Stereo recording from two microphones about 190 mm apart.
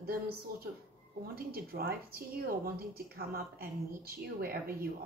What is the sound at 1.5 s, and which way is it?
Speech, 50° right (ahead or behind).